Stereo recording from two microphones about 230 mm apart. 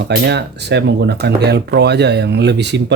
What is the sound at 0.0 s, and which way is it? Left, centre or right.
Speech, right.